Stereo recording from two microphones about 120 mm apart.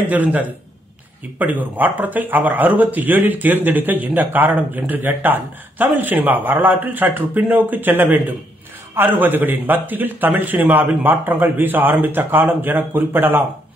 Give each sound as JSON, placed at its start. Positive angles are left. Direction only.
{"t": 0.1, "sound": "speech", "side_deg": -15}